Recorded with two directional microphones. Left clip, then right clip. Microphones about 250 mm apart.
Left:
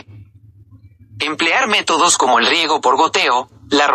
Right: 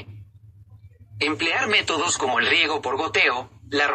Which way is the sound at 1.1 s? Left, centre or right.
Left.